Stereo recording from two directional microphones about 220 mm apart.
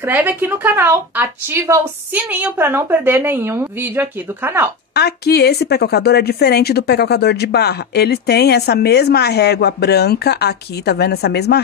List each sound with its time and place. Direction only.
0.0 s a woman's voice: 10° right (ahead or behind)
4.9 s speech: 45° left (ahead or behind)